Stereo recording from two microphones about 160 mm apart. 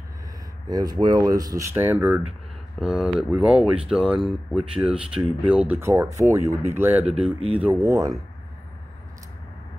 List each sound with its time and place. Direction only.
0.7 s speech: 25° right (ahead or behind)